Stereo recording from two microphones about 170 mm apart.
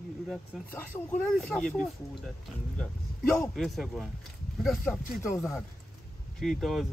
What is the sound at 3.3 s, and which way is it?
Speech, centre (ahead or behind).